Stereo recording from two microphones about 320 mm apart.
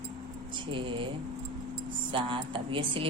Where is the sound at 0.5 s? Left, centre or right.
Centre.